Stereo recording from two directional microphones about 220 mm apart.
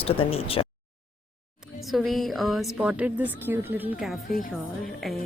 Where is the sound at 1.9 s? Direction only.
Centre (ahead or behind).